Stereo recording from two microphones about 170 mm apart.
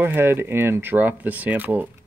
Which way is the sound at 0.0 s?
15° right (ahead or behind).